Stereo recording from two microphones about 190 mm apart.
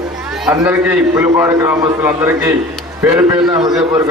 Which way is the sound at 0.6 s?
10° right (ahead or behind).